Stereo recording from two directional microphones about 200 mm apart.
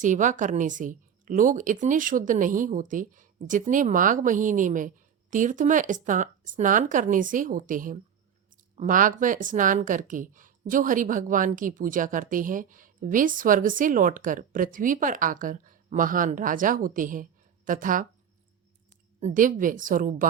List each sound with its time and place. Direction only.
0.0 s a woman's voice: 40° right (ahead or behind)
19.2 s a woman's voice: 40° right (ahead or behind)